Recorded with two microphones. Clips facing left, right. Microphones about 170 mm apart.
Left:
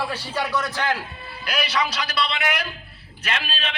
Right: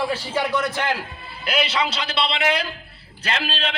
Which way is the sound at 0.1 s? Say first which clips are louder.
Right 3 dB; 25° right (ahead or behind).